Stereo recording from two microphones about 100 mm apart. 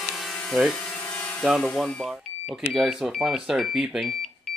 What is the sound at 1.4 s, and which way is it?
Speech, centre (ahead or behind).